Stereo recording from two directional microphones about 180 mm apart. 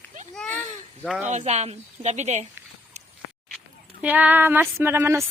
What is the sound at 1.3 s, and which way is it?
A woman's voice, 40° right (ahead or behind).